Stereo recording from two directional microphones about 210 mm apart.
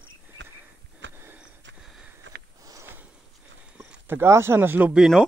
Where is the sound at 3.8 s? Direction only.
10° right (ahead or behind).